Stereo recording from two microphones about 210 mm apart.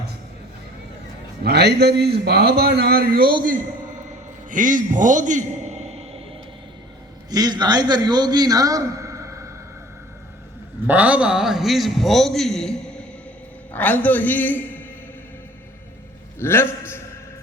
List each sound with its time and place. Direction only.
1.5 s a man's voice: 50° right (ahead or behind)
4.5 s a man's voice: 40° right (ahead or behind)
7.3 s a man's voice: 20° right (ahead or behind)
10.8 s a man's voice: 5° right (ahead or behind); by 14.6 s 10° left (ahead or behind)
16.4 s a man's voice: 10° left (ahead or behind)